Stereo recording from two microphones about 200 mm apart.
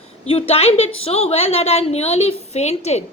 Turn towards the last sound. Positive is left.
turn(degrees=35)  # may be behind; listen again after turning